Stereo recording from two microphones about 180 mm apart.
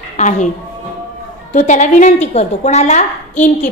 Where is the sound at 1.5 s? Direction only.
40° left (ahead or behind).